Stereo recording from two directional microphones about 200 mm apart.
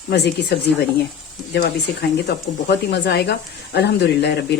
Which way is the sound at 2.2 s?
60° left (ahead or behind).